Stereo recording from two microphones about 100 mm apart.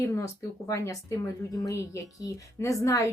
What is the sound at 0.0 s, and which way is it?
Speech, 30° left (ahead or behind).